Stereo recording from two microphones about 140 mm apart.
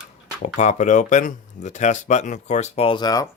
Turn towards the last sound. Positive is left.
turn(degrees=30)  # may be behind; listen again after turning